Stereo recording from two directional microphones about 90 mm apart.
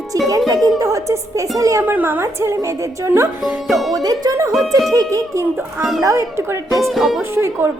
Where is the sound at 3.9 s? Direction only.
45° right (ahead or behind).